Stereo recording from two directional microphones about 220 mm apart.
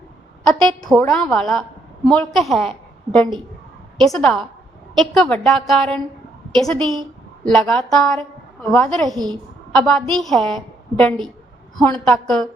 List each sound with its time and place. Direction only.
0.9 s a woman's voice: centre (ahead or behind)
6.7 s a woman's voice: 20° right (ahead or behind)
7.4 s a woman's voice: centre (ahead or behind)
9.0 s a woman's voice: 15° right (ahead or behind)
9.7 s a woman's voice: 5° left (ahead or behind)